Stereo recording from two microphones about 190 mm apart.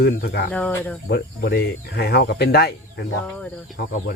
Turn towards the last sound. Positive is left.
turn(degrees=50)  # may be behind; listen again after turning